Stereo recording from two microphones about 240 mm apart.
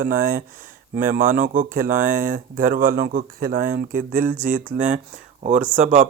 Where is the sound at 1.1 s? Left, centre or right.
Right.